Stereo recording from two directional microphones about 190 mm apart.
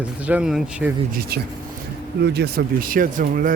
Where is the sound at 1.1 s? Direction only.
55° right (ahead or behind).